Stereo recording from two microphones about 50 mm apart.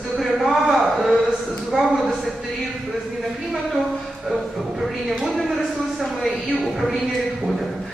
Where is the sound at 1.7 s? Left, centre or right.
Right.